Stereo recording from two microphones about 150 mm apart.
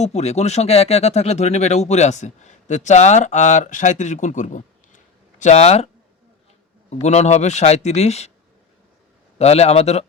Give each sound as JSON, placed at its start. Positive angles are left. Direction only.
{"t": 0.0, "sound": "speech", "side_deg": 45}
{"t": 6.9, "sound": "speech", "side_deg": 50}
{"t": 9.4, "sound": "speech", "side_deg": 45}